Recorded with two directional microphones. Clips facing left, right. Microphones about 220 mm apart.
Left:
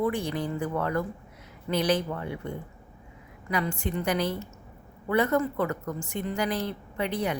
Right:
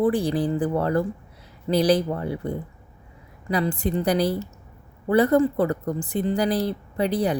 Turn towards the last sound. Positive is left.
turn(degrees=-35)  # may be behind; listen again after turning